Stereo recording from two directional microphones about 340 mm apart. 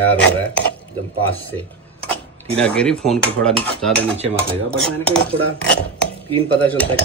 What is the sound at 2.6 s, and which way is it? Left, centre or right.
Dishes, centre.